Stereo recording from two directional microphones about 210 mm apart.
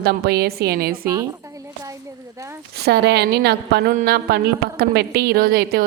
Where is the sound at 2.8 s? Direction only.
50° right (ahead or behind).